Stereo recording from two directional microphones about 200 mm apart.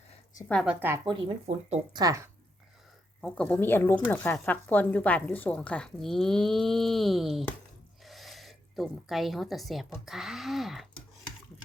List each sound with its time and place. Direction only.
0.4 s speech: 5° left (ahead or behind)
0.7 s a woman's voice: 10° right (ahead or behind)
1.5 s speech: 35° right (ahead or behind)
1.9 s a woman's voice: 20° right (ahead or behind)
3.2 s a woman's voice: 5° left (ahead or behind)